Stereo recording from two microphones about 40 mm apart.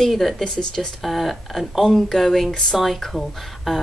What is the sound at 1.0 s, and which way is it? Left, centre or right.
Speech, centre.